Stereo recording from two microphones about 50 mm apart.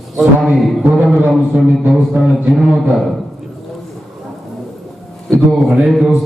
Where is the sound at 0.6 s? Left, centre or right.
Centre.